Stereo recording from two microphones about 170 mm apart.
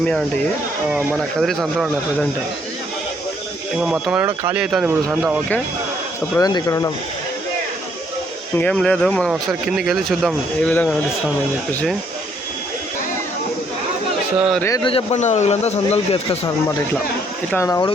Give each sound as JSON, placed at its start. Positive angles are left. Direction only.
{"t": 1.4, "sound": "speech", "side_deg": 0}
{"t": 3.8, "sound": "speech", "side_deg": -5}
{"t": 6.4, "sound": "speech", "side_deg": 20}
{"t": 8.5, "sound": "speech", "side_deg": 5}
{"t": 14.3, "sound": "speech", "side_deg": -5}
{"t": 14.8, "sound": "a man's voice", "side_deg": 40}
{"t": 17.5, "sound": "speech", "side_deg": 15}